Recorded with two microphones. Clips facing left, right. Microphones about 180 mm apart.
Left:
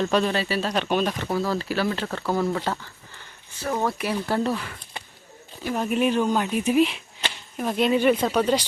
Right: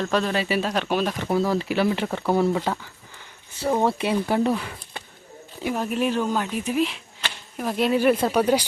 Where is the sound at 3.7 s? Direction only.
25° right (ahead or behind).